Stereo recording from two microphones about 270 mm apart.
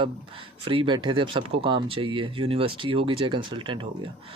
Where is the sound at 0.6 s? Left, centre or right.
Centre.